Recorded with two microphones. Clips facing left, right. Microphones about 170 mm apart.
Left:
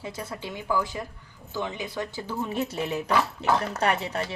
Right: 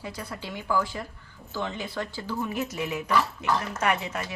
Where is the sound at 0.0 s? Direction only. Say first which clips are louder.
Left 2 dB; 25° left (ahead or behind).